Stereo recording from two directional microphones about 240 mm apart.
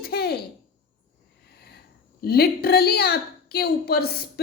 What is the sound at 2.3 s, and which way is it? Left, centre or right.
A woman's voice, left.